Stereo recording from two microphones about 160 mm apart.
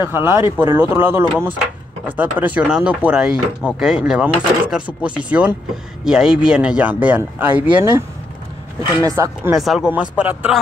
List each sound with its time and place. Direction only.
0.0 s speech: 15° right (ahead or behind)
9.0 s speech: 20° right (ahead or behind)
9.6 s speech: centre (ahead or behind)